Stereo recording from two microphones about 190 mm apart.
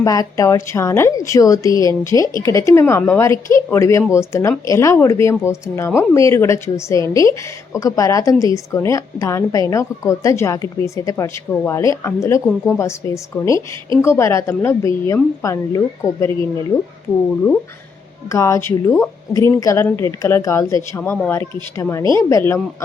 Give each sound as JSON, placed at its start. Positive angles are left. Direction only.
{"t": 0.0, "sound": "a woman's voice", "side_deg": 20}
{"t": 18.3, "sound": "a woman's voice", "side_deg": 15}